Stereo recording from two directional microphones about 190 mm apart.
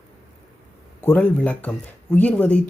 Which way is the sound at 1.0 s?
10° left (ahead or behind).